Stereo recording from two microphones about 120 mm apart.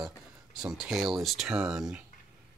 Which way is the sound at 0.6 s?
5° right (ahead or behind).